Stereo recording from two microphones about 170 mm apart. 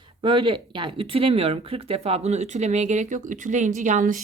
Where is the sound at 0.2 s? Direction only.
30° right (ahead or behind).